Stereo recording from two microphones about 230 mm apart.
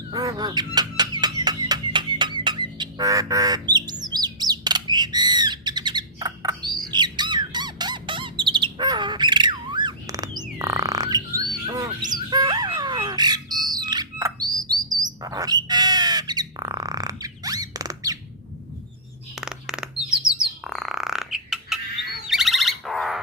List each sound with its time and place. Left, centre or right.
0.1 s a sound: centre
4.0 s bird: centre
6.8 s squawk: centre
10.6 s bird: centre
13.7 s chirp: centre
19.4 s bird: centre